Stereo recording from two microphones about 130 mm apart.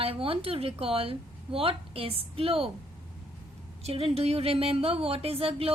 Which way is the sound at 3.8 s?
50° right (ahead or behind).